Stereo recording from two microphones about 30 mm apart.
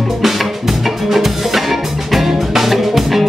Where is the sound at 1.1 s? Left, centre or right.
Centre.